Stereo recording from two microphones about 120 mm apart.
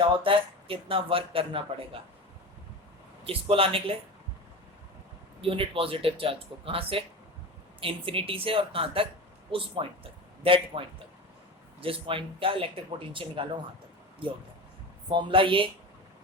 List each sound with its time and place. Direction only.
0.0 s speech: 45° right (ahead or behind)
3.2 s speech: 50° right (ahead or behind)
5.4 s speech: 50° right (ahead or behind)
15.3 s speech: 45° right (ahead or behind)